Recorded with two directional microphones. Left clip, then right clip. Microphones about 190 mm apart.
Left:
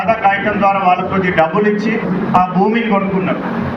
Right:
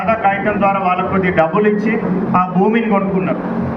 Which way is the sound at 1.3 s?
25° left (ahead or behind).